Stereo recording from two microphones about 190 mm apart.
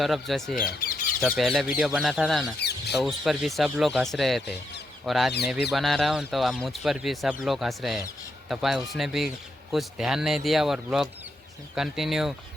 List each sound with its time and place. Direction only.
0.0 s speech: centre (ahead or behind)
2.6 s a sound: 60° left (ahead or behind)
3.0 s speech: centre (ahead or behind)